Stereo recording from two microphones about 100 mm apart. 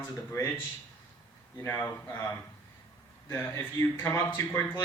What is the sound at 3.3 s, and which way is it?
Speech, 20° left (ahead or behind).